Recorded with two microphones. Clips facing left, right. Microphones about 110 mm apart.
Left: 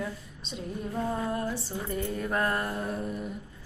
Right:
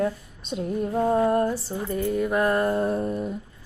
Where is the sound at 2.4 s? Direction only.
20° right (ahead or behind); by 3.2 s 35° right (ahead or behind).